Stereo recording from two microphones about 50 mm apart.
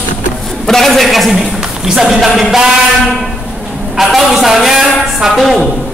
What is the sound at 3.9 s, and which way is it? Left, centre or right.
A man's voice, centre.